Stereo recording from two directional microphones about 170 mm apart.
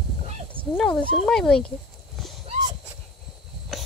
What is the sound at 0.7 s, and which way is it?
Speech, 5° left (ahead or behind).